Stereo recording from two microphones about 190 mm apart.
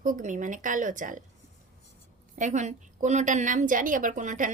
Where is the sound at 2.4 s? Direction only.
40° right (ahead or behind).